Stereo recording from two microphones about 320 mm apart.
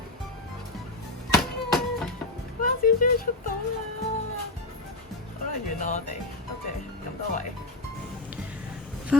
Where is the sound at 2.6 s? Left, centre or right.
Left.